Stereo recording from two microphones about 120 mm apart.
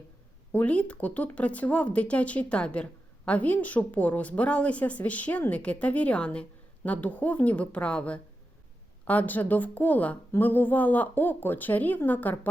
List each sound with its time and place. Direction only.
0.5 s speech: 10° left (ahead or behind)